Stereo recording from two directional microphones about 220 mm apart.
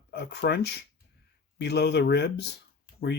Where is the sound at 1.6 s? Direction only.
50° left (ahead or behind).